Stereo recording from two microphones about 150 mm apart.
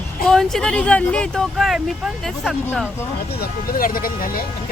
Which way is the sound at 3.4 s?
75° left (ahead or behind).